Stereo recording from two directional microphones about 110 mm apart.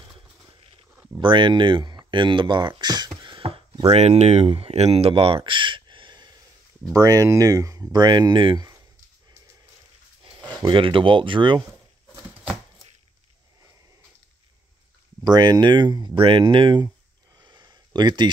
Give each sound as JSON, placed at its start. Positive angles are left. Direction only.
{"t": 1.2, "sound": "speech", "side_deg": -45}
{"t": 3.9, "sound": "speech", "side_deg": -80}
{"t": 6.9, "sound": "speech", "side_deg": -30}
{"t": 10.7, "sound": "speech", "side_deg": -50}
{"t": 15.2, "sound": "speech", "side_deg": -35}
{"t": 17.4, "sound": "a sound", "side_deg": -40}